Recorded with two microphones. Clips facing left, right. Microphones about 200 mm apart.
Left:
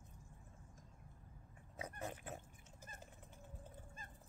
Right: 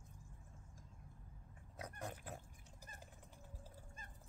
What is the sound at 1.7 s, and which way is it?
Pig, 5° left (ahead or behind).